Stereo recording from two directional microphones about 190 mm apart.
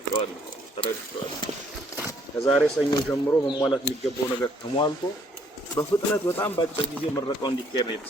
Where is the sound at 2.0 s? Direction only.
10° left (ahead or behind).